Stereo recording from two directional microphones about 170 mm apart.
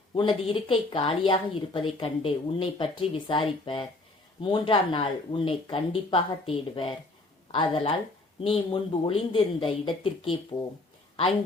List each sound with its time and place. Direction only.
0.2 s speech: 30° left (ahead or behind)